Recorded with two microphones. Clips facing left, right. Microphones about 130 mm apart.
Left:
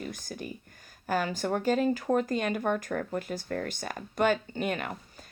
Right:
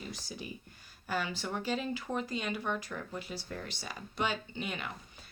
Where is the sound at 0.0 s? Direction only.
50° left (ahead or behind).